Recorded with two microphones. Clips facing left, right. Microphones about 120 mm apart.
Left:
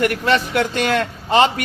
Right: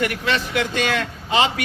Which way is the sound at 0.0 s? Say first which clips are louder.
Left 5 dB; 50° left (ahead or behind).